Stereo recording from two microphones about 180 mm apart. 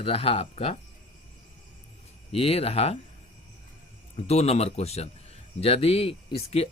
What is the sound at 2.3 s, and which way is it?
Speech, 35° left (ahead or behind).